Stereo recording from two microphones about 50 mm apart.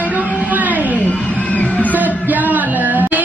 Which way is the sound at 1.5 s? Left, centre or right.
Left.